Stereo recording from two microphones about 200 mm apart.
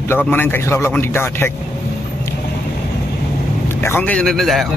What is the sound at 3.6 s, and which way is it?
A man's voice, 10° left (ahead or behind).